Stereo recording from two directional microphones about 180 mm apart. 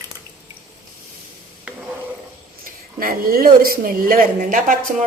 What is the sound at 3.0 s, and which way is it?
A woman's voice, 55° right (ahead or behind).